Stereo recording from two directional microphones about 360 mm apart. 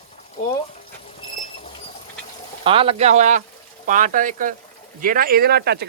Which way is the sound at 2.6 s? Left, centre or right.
Centre.